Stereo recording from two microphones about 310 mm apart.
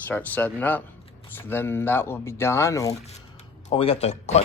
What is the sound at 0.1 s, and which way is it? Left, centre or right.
Speech, centre.